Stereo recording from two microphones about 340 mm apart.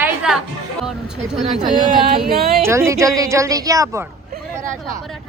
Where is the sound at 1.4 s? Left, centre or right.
Centre.